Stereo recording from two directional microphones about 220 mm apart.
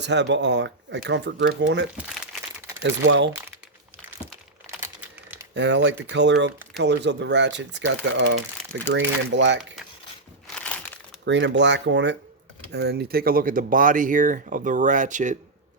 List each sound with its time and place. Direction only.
0.0 s speech: 50° right (ahead or behind)
5.5 s speech: 55° right (ahead or behind)
10.4 s crushing: 5° left (ahead or behind)
11.3 s speech: 55° right (ahead or behind); by 15.4 s 35° right (ahead or behind)